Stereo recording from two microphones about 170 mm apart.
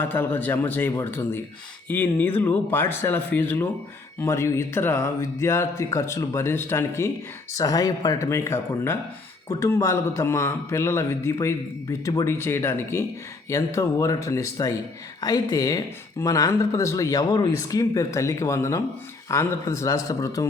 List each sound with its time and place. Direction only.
0.0 s a man's voice: 10° left (ahead or behind)